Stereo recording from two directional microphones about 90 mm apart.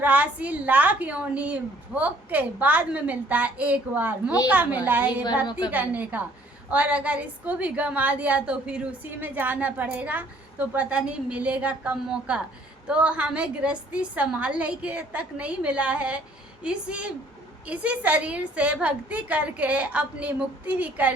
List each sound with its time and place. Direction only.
0.0 s a woman's voice: 15° right (ahead or behind)
5.5 s a woman's voice: 55° left (ahead or behind)
5.7 s a woman's voice: 20° right (ahead or behind)
9.0 s a woman's voice: 20° right (ahead or behind)